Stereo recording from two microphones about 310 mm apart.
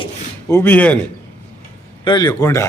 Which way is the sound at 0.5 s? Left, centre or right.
Centre.